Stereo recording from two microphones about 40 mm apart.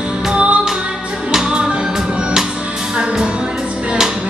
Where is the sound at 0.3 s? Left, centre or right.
Right.